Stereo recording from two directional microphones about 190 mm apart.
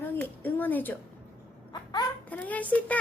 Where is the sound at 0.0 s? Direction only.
10° left (ahead or behind).